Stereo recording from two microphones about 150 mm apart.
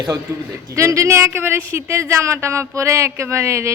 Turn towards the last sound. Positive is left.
turn(degrees=-20)  # may be behind; listen again after turning